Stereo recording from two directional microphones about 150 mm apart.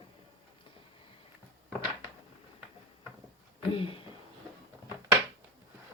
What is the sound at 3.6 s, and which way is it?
Speech, 35° left (ahead or behind).